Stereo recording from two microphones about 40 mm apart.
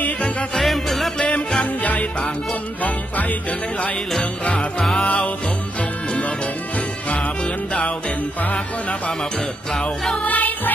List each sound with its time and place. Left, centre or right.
0.6 s music: centre
1.8 s music: left
4.2 s music: left
10.2 s music: left